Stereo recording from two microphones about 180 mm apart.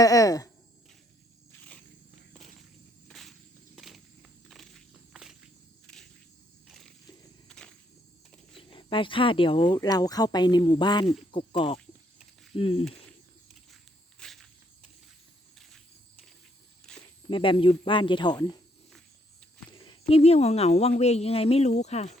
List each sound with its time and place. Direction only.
0.0 s speech: 20° left (ahead or behind)
2.3 s walk: centre (ahead or behind)
3.1 s snake: centre (ahead or behind)
3.8 s walk: centre (ahead or behind)
6.7 s wild animals: centre (ahead or behind)
7.4 s walk: 5° left (ahead or behind)
8.5 s speech: 30° left (ahead or behind)
14.2 s walk: centre (ahead or behind)
16.8 s snake: 5° left (ahead or behind)
17.2 s speech: 30° left (ahead or behind)
19.7 s speech: 30° left (ahead or behind)